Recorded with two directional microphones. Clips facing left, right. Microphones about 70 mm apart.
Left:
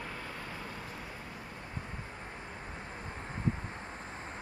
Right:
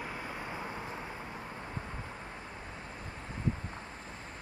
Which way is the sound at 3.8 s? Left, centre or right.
Left.